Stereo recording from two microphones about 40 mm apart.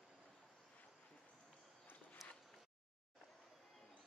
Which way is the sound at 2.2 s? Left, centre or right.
Centre.